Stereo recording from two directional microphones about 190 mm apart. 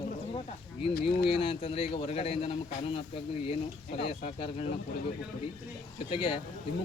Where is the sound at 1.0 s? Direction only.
30° left (ahead or behind).